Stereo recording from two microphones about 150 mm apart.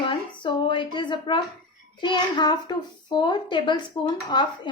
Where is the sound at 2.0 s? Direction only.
30° left (ahead or behind).